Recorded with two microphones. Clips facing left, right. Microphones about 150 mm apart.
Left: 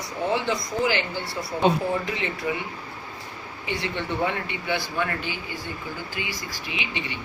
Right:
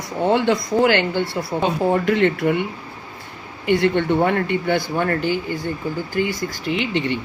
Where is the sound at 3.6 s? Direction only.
55° right (ahead or behind).